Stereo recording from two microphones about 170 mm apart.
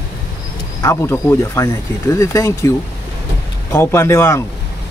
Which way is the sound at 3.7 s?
15° left (ahead or behind).